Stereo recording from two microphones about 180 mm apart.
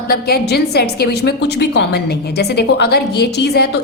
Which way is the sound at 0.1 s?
60° left (ahead or behind).